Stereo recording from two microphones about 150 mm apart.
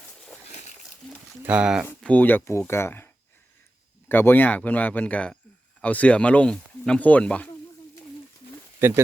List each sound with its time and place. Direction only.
1.4 s speech: 10° right (ahead or behind)
2.0 s speech: 10° left (ahead or behind)
4.1 s speech: 15° left (ahead or behind)
8.8 s speech: 15° right (ahead or behind)